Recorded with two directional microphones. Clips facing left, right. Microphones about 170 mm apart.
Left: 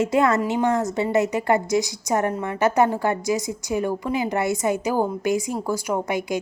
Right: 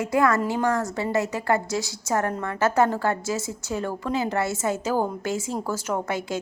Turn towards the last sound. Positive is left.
turn(degrees=15)  # may be behind; listen again after turning